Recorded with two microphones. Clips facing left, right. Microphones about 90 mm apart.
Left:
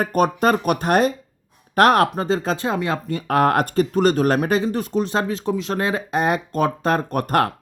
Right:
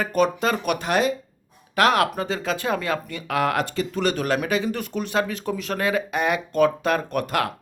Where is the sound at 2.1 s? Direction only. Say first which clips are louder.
Left 4 dB; 35° left (ahead or behind).